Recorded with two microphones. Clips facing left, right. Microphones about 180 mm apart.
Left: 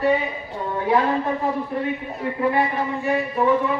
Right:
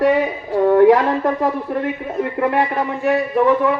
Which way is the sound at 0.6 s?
75° right (ahead or behind).